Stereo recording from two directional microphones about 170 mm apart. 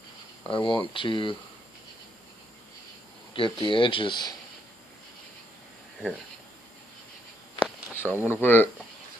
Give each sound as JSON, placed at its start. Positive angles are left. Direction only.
{"t": 0.4, "sound": "speech", "side_deg": 30}
{"t": 3.3, "sound": "speech", "side_deg": 30}
{"t": 7.9, "sound": "speech", "side_deg": 10}